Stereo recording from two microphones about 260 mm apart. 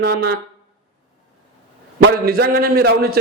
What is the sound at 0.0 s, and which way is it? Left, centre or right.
Speech, right.